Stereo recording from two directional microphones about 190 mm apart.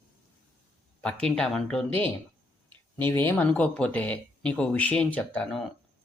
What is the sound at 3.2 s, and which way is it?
Speech, 10° left (ahead or behind).